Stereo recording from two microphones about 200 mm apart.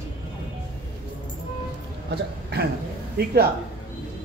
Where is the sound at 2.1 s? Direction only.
55° right (ahead or behind).